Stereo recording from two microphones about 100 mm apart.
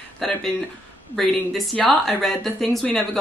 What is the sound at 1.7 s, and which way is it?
Speech, 5° left (ahead or behind).